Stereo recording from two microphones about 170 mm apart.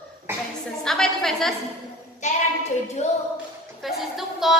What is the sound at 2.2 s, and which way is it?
Speech, 45° left (ahead or behind).